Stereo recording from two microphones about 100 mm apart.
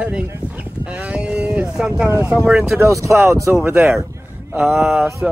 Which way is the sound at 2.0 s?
30° right (ahead or behind).